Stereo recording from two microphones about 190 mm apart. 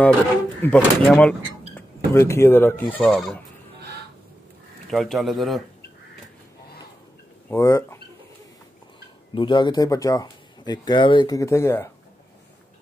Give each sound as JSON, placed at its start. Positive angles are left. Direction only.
{"t": 0.6, "sound": "speech", "side_deg": 5}
{"t": 4.8, "sound": "speech", "side_deg": 0}
{"t": 7.4, "sound": "speech", "side_deg": 15}
{"t": 9.3, "sound": "speech", "side_deg": 25}